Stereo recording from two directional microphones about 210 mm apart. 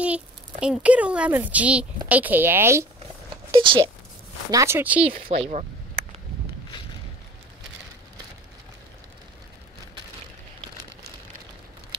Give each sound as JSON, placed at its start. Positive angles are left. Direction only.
{"t": 0.0, "sound": "speech", "side_deg": -5}
{"t": 3.5, "sound": "speech", "side_deg": -25}
{"t": 5.4, "sound": "a sound", "side_deg": -35}